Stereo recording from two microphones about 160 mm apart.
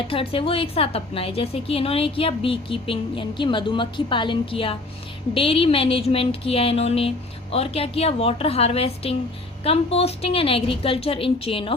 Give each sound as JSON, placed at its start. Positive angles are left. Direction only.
{"t": 0.1, "sound": "a woman's voice", "side_deg": 35}